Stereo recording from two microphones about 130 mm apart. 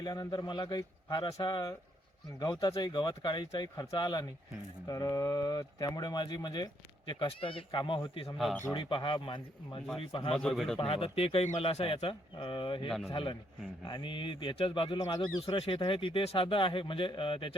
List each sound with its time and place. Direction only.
0.0 s speech: 30° left (ahead or behind)
10.3 s a man's voice: 5° left (ahead or behind)
10.8 s speech: 45° left (ahead or behind)